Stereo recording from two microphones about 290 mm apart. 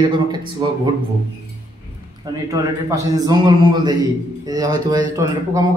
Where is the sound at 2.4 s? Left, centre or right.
Centre.